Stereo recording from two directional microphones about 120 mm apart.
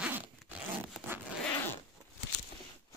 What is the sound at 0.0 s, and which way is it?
Zipper, 15° right (ahead or behind).